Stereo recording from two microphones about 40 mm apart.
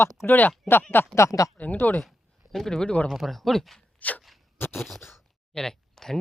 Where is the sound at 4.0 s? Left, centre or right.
Left.